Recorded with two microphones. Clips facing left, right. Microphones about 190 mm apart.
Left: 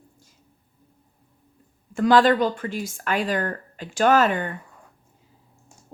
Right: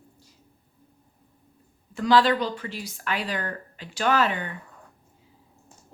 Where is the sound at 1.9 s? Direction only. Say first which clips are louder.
Left 4 dB; 50° left (ahead or behind).